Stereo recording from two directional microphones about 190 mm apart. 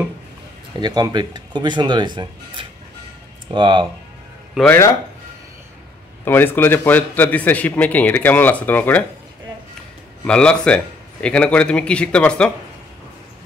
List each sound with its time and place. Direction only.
0.7 s speech: 25° right (ahead or behind)
4.6 s a man's voice: 10° left (ahead or behind)
6.2 s a man's voice: 10° left (ahead or behind)
10.2 s a man's voice: 5° left (ahead or behind)